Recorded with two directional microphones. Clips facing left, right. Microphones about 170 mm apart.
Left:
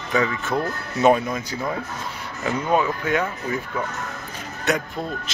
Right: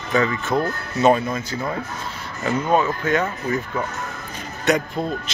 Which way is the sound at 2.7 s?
10° left (ahead or behind).